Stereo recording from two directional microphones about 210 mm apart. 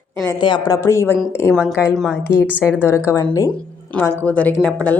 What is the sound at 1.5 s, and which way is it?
A woman's voice, 5° right (ahead or behind).